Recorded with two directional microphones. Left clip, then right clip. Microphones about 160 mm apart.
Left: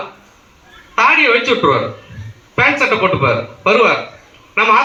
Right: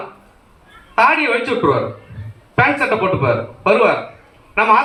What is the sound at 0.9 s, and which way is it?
Speech, 5° right (ahead or behind).